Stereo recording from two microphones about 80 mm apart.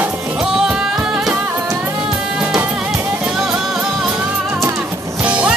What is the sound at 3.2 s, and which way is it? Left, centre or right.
Music, centre.